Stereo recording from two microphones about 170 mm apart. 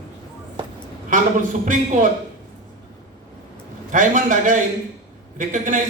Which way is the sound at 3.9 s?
50° right (ahead or behind).